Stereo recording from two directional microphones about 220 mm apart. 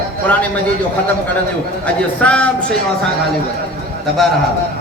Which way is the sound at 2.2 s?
5° left (ahead or behind).